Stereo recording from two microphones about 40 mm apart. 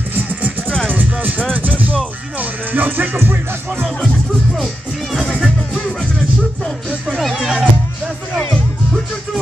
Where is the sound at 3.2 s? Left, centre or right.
Right.